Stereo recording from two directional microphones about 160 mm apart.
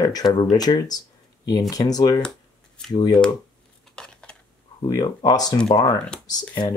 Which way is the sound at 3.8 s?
5° left (ahead or behind).